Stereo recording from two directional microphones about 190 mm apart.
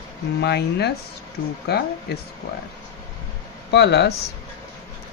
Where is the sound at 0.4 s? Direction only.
60° left (ahead or behind).